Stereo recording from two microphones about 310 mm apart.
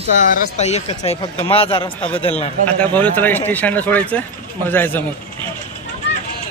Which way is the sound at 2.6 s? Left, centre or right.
Centre.